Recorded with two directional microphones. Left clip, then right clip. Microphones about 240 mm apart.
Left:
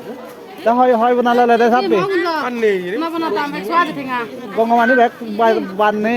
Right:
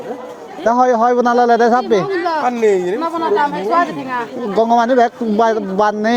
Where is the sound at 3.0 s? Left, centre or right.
Left.